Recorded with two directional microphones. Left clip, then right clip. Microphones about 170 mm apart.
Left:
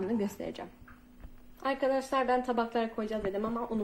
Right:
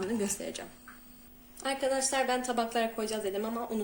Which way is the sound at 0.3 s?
25° left (ahead or behind).